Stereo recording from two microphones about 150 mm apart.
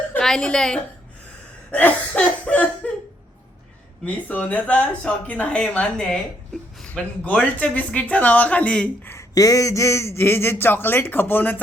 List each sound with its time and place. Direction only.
0.1 s a woman's voice: 5° left (ahead or behind)
4.0 s speech: 10° left (ahead or behind)
9.1 s speech: 20° left (ahead or behind)